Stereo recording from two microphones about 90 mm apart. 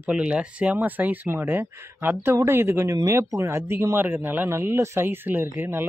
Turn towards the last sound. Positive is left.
turn(degrees=-20)  # may be behind; listen again after turning